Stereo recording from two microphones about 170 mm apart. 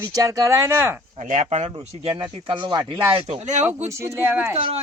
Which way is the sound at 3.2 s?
40° right (ahead or behind).